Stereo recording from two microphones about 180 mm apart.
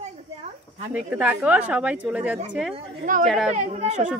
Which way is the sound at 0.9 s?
10° right (ahead or behind).